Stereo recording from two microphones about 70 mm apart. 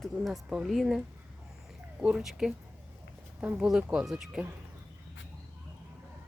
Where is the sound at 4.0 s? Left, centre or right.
Centre.